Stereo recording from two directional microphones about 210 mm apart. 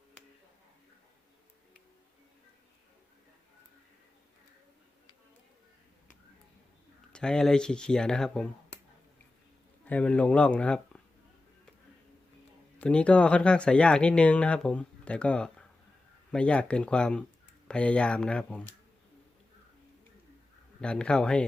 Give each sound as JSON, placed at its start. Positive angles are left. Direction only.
{"t": 7.1, "sound": "speech", "side_deg": 5}
{"t": 9.8, "sound": "speech", "side_deg": 5}
{"t": 12.8, "sound": "speech", "side_deg": 5}
{"t": 20.8, "sound": "speech", "side_deg": 5}